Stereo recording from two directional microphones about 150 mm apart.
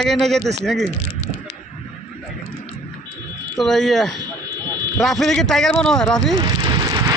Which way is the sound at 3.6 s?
Centre (ahead or behind).